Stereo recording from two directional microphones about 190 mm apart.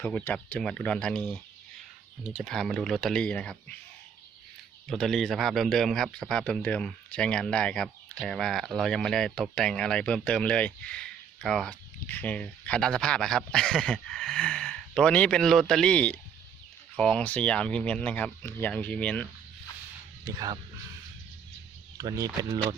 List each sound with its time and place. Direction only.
0.0 s speech: 10° left (ahead or behind)
2.4 s speech: centre (ahead or behind)
4.9 s speech: centre (ahead or behind)
21.9 s speech: 20° right (ahead or behind)